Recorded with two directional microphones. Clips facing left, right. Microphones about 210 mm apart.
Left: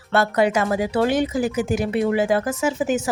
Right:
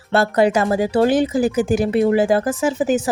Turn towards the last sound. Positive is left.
turn(degrees=-35)  # may be behind; listen again after turning